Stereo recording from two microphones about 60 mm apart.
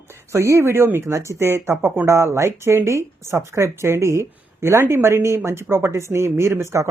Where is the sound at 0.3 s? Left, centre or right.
Right.